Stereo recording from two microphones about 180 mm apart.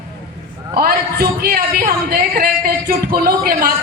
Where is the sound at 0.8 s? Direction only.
55° right (ahead or behind).